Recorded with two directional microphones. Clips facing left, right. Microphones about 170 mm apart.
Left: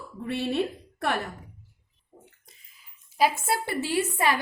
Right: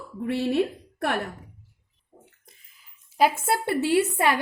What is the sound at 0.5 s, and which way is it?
Speech, 55° right (ahead or behind).